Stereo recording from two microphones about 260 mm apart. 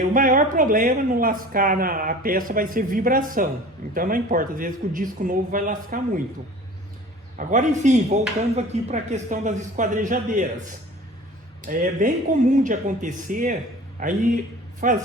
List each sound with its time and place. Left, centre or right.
0.0 s speech: right
7.3 s speech: right
11.6 s speech: right